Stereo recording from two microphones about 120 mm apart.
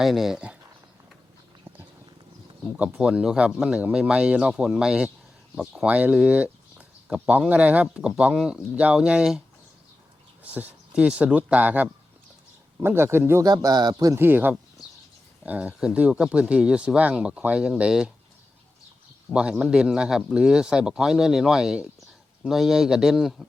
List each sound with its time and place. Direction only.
0.0 s speech: centre (ahead or behind)
2.7 s speech: 10° right (ahead or behind)
10.4 s speech: 10° right (ahead or behind)
13.4 s speech: 30° right (ahead or behind)
14.2 s speech: 15° right (ahead or behind)
19.3 s speech: 10° right (ahead or behind)